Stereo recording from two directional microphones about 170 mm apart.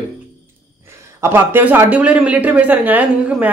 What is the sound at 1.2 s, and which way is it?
Speech, 15° right (ahead or behind).